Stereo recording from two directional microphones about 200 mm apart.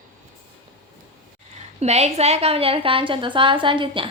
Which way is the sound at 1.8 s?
35° right (ahead or behind).